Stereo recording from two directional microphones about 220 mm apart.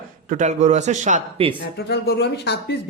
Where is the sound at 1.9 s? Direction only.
45° left (ahead or behind).